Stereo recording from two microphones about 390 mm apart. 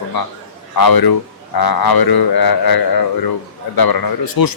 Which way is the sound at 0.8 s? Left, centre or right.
Left.